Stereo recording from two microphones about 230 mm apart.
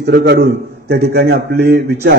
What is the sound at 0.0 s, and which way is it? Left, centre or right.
A man's voice, right.